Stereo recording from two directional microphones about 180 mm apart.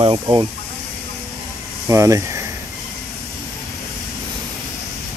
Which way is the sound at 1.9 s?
15° right (ahead or behind).